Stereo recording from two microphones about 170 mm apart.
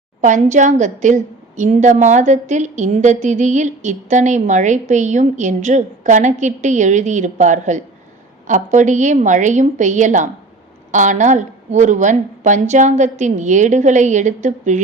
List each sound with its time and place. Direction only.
0.2 s a woman's voice: 45° right (ahead or behind)